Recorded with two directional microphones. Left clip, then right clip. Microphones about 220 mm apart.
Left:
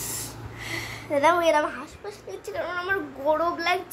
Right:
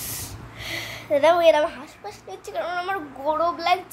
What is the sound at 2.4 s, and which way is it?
A child's voice, 25° right (ahead or behind).